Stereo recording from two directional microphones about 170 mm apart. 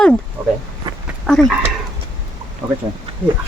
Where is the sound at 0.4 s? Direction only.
30° right (ahead or behind).